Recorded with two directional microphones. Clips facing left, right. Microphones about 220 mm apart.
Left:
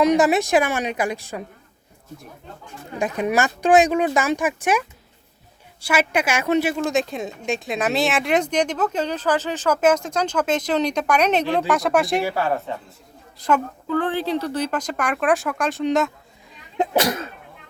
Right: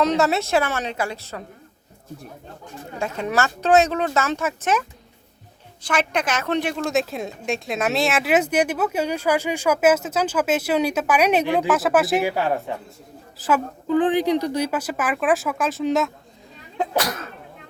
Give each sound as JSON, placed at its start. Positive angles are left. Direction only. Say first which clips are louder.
{"t": 0.0, "sound": "speech", "louder": "left 3 dB", "side_deg": 15}
{"t": 3.0, "sound": "a woman's voice", "louder": "left 2 dB", "side_deg": 15}
{"t": 12.2, "sound": "a woman's voice", "louder": "right 1 dB", "side_deg": -15}
{"t": 13.8, "sound": "a woman's voice", "louder": "right 4 dB", "side_deg": -15}
{"t": 16.7, "sound": "speech", "louder": "left 3 dB", "side_deg": 25}